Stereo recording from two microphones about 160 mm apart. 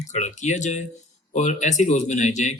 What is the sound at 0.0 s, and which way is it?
Speech, 45° left (ahead or behind).